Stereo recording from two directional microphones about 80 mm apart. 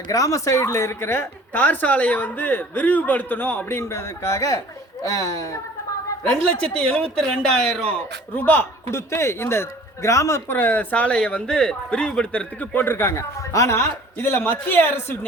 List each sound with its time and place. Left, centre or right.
0.1 s a woman's voice: left
6.7 s a man's voice: centre
8.4 s a man's voice: left
10.6 s a man's voice: left
12.7 s a woman's voice: left